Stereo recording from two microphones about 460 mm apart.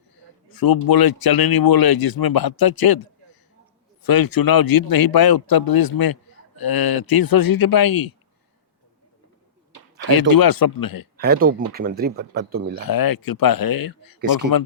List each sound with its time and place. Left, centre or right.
0.4 s a man's voice: left
9.7 s speech: left
11.2 s speech: centre
12.8 s a man's voice: left